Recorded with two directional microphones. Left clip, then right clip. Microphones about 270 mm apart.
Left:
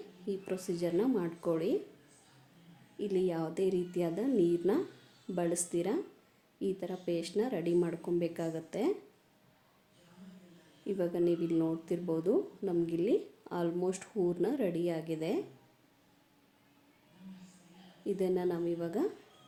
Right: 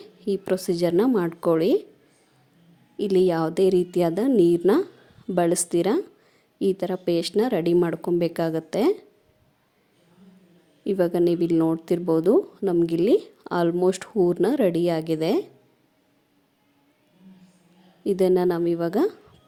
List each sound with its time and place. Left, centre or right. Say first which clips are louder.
0.0 s a woman's voice: right 12 dB; right
3.0 s a woman's voice: right 12 dB; right
10.8 s a woman's voice: right 11 dB; right
18.0 s a woman's voice: right 12 dB; right